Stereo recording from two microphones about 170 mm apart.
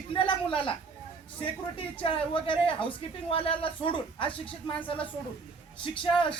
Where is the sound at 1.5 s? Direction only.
30° left (ahead or behind).